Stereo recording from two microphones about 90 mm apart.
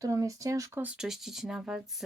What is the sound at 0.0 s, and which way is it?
Speech, 35° right (ahead or behind).